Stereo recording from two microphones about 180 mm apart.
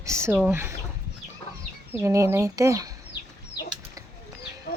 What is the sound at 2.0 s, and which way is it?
Speech, 15° right (ahead or behind).